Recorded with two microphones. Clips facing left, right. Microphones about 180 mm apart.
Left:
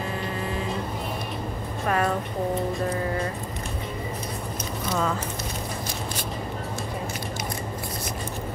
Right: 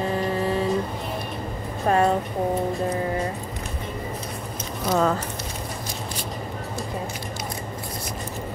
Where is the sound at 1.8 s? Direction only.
25° right (ahead or behind).